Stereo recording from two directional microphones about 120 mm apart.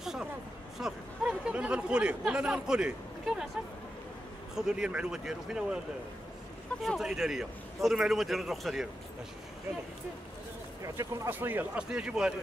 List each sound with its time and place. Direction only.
0.0 s a sound: 5° right (ahead or behind)
4.6 s a man's voice: 5° right (ahead or behind)
6.8 s a man's voice: centre (ahead or behind)
10.8 s speech: 25° right (ahead or behind); by 12.4 s 10° right (ahead or behind)